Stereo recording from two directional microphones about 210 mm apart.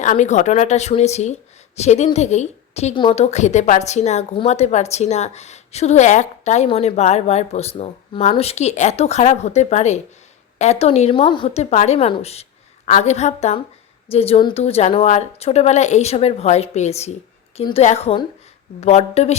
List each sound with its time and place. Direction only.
0.0 s a woman's voice: 35° left (ahead or behind)